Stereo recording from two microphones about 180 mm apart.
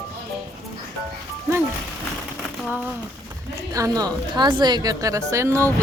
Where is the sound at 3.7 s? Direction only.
20° right (ahead or behind).